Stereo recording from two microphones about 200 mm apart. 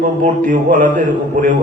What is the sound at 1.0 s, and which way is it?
Mantra, 40° right (ahead or behind).